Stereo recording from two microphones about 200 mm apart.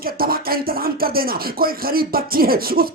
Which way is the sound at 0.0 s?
50° right (ahead or behind).